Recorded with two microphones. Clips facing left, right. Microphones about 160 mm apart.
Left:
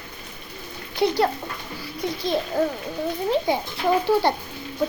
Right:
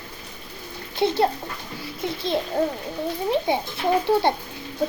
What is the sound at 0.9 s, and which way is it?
A child's voice, 25° right (ahead or behind).